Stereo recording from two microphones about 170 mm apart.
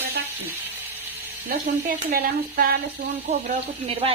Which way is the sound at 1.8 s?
60° right (ahead or behind).